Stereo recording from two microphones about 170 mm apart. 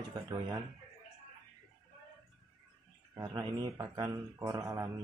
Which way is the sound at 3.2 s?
20° right (ahead or behind).